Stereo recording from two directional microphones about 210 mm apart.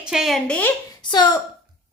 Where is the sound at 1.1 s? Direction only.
20° left (ahead or behind).